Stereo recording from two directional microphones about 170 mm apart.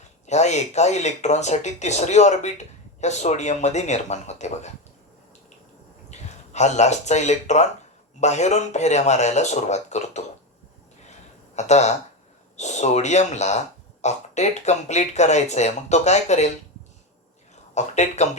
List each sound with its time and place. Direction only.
0.3 s speech: 40° left (ahead or behind)
6.1 s speech: 40° left (ahead or behind)
11.5 s speech: 40° left (ahead or behind)
17.5 s speech: 40° left (ahead or behind)